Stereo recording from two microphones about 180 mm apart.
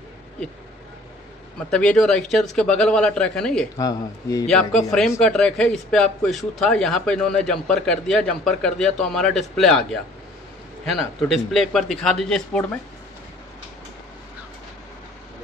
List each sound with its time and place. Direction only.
1.7 s a man's voice: 5° left (ahead or behind)
3.7 s speech: 20° left (ahead or behind)
4.5 s a man's voice: 5° left (ahead or behind)
10.9 s a man's voice: centre (ahead or behind)